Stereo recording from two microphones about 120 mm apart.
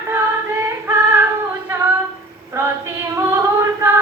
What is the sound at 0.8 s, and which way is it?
Female singing, 20° right (ahead or behind).